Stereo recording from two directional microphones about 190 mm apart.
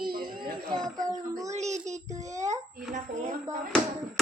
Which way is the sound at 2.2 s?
15° right (ahead or behind).